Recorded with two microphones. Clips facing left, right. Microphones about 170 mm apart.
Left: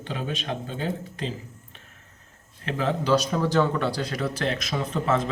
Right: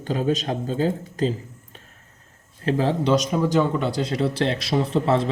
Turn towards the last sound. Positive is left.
turn(degrees=-30)  # may be behind; listen again after turning